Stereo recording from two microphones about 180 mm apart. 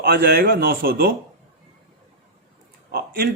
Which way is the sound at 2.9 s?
60° right (ahead or behind).